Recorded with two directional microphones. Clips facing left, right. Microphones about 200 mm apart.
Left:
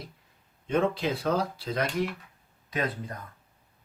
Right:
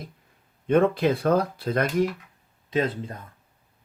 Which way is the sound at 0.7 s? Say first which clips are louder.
Right 6 dB; 55° right (ahead or behind).